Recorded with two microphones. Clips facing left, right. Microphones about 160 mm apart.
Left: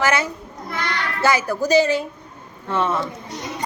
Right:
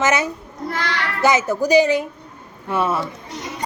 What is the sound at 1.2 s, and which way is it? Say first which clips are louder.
A woman's voice: right 2 dB; 20° right (ahead or behind).